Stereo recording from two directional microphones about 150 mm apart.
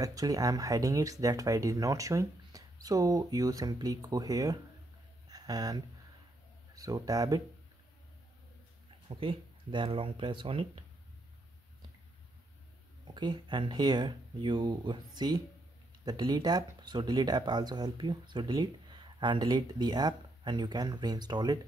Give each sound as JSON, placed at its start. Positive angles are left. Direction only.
{"t": 0.0, "sound": "speech", "side_deg": -25}
{"t": 5.3, "sound": "a sound", "side_deg": -25}
{"t": 6.7, "sound": "speech", "side_deg": -25}
{"t": 9.1, "sound": "speech", "side_deg": -35}
{"t": 13.0, "sound": "speech", "side_deg": -30}